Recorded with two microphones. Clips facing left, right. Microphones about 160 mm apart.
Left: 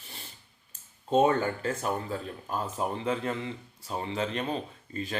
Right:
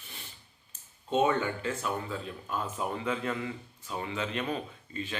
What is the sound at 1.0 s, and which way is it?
Speech, 40° left (ahead or behind).